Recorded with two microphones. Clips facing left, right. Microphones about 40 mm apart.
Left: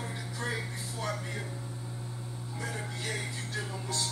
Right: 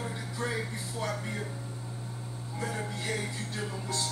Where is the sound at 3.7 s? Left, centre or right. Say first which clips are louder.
Right 1 dB; right.